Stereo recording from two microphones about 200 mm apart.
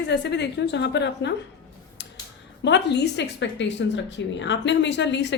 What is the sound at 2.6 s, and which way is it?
A woman's voice, 60° left (ahead or behind).